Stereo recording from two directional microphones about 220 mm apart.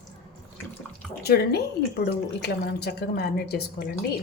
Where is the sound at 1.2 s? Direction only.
45° left (ahead or behind).